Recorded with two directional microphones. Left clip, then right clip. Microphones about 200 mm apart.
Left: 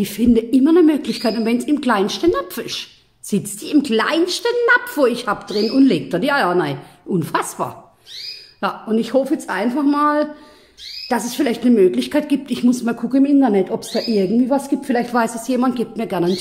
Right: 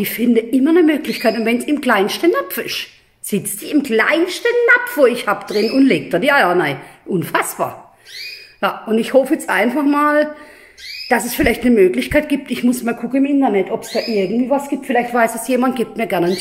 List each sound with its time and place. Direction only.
0.0 s a woman's voice: 10° left (ahead or behind)
13.2 s a woman's voice: 20° left (ahead or behind)
15.2 s a woman's voice: centre (ahead or behind)